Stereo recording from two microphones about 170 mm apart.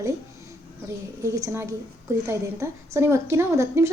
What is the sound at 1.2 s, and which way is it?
A woman's voice, 15° right (ahead or behind).